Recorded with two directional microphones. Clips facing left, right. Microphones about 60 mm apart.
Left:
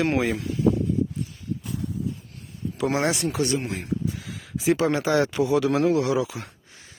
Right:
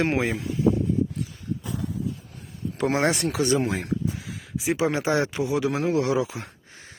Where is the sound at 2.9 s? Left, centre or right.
Right.